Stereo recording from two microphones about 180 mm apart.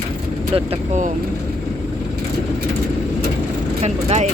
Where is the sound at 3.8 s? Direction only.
40° right (ahead or behind).